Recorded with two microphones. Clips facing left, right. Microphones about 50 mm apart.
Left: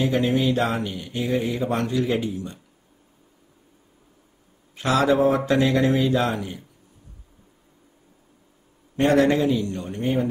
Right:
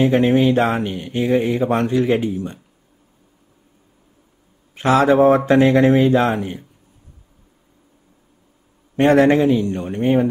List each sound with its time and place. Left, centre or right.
0.0 s speech: right
4.7 s speech: right
8.9 s speech: right